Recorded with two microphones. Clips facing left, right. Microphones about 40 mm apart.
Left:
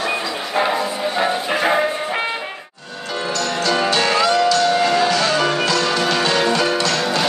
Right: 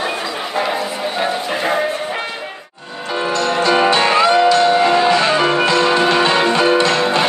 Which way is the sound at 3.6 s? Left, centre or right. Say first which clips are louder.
Right 4 dB; right.